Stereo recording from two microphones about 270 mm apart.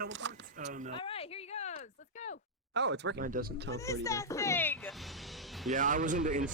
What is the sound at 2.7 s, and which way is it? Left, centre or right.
Speech, right.